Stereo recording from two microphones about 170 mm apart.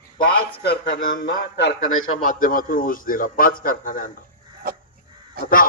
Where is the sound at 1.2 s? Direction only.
85° left.